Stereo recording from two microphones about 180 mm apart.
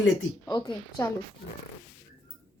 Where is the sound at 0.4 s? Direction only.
25° left (ahead or behind).